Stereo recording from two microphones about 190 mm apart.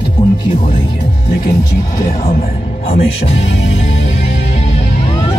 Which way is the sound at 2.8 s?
35° left (ahead or behind).